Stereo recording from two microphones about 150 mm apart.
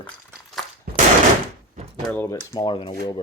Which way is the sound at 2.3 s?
25° left (ahead or behind).